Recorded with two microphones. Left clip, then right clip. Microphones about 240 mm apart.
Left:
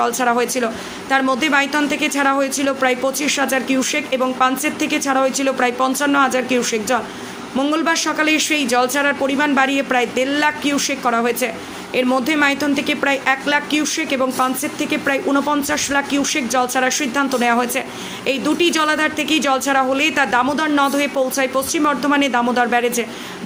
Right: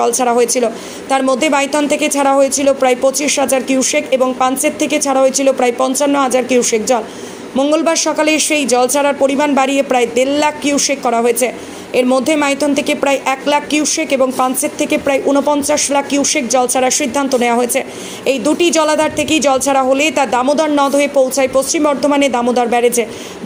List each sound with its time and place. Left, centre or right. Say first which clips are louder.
0.0 s speech: right 5 dB; centre